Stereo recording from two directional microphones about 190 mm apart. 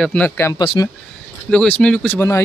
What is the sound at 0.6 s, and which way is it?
Speech, 25° left (ahead or behind).